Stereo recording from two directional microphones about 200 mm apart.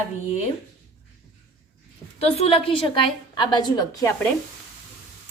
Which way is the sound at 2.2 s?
30° left (ahead or behind).